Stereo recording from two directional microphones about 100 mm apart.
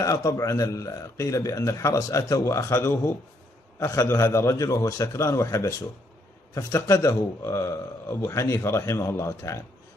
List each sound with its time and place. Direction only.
0.0 s a man's voice: 35° left (ahead or behind)